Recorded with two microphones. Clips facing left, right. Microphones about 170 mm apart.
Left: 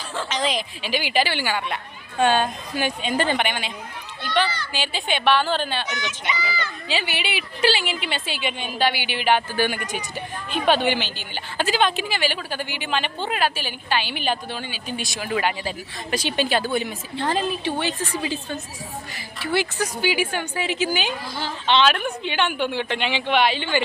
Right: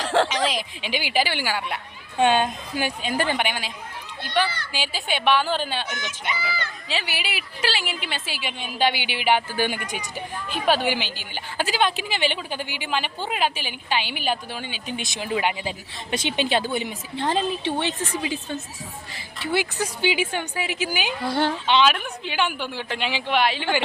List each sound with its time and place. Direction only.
0.0 s a sound: 85° right
0.8 s a woman's voice: 15° right (ahead or behind)
2.1 s a woman's voice: 20° right (ahead or behind)
4.7 s a woman's voice: 10° right (ahead or behind)
5.9 s speech: 50° right (ahead or behind)
6.8 s a woman's voice: centre (ahead or behind)
8.8 s a woman's voice: 15° right (ahead or behind)
21.2 s a woman's voice: 60° right (ahead or behind)
21.7 s a woman's voice: 5° right (ahead or behind)